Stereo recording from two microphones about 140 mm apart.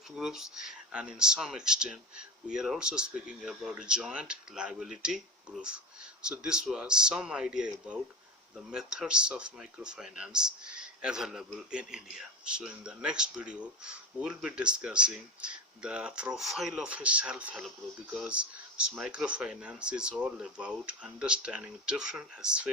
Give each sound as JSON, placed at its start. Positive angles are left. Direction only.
{"t": 0.2, "sound": "speech", "side_deg": -5}